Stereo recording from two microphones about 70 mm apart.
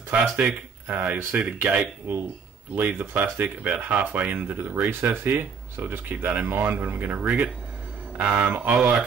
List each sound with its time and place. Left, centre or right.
0.1 s speech: centre
0.8 s speech: right
8.7 s speech: centre